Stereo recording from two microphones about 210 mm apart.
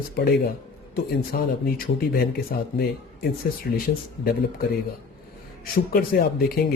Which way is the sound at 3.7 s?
50° left (ahead or behind).